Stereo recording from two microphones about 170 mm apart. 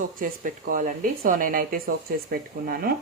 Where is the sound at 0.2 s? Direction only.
50° right (ahead or behind).